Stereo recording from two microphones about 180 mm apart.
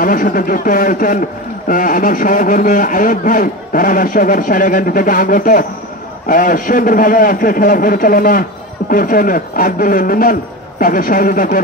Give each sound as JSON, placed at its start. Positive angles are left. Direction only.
{"t": 0.0, "sound": "a man's voice", "side_deg": 50}